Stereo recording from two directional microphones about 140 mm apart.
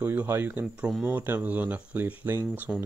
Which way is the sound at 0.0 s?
10° right (ahead or behind).